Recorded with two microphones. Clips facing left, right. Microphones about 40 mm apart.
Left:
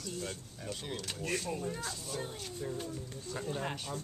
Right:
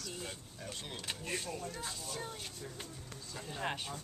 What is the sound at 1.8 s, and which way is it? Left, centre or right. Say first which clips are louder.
Speech: left 3 dB; centre.